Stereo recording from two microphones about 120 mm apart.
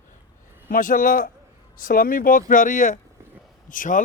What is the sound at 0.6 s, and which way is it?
Speech, 90° left.